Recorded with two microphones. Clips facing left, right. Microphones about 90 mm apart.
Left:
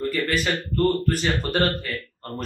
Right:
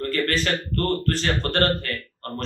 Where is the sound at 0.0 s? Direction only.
5° left (ahead or behind).